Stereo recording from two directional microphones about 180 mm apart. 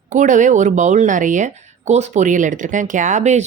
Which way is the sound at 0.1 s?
45° right (ahead or behind).